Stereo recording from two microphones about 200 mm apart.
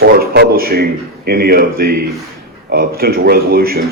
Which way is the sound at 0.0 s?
50° right (ahead or behind).